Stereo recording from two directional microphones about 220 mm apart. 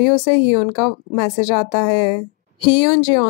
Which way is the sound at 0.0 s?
20° left (ahead or behind).